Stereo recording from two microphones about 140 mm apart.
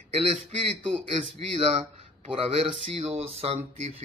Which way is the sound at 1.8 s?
45° right (ahead or behind).